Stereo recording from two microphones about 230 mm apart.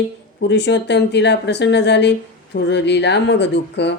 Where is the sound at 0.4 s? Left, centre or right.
Left.